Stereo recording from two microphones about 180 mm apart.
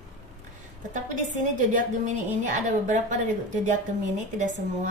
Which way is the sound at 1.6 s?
45° right (ahead or behind).